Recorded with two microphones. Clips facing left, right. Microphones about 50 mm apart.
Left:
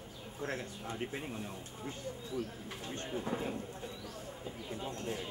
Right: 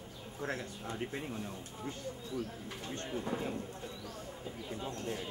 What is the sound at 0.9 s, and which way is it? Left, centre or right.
Speech, centre.